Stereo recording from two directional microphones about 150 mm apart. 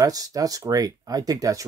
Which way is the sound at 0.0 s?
25° right (ahead or behind).